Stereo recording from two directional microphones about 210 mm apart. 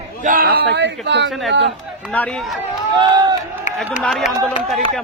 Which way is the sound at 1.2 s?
Centre (ahead or behind).